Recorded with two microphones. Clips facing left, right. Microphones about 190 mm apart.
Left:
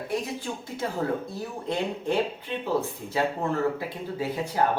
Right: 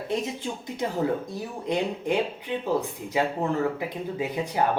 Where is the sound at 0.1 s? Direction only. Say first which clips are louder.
Right 2 dB; 20° right (ahead or behind).